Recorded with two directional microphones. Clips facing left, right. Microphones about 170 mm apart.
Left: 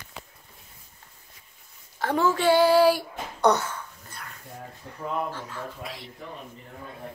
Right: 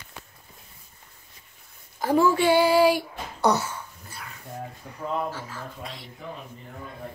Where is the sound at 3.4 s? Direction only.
5° right (ahead or behind).